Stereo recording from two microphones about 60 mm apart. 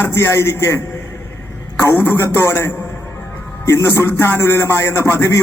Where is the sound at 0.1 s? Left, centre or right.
Left.